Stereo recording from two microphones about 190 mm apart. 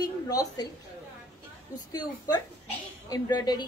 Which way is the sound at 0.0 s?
20° left (ahead or behind).